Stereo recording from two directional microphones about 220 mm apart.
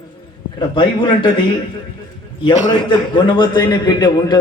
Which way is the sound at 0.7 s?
20° left (ahead or behind).